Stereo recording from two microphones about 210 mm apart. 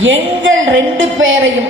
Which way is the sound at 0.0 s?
65° right (ahead or behind).